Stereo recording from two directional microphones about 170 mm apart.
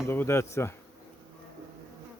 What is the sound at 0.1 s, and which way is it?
Speech, 15° left (ahead or behind).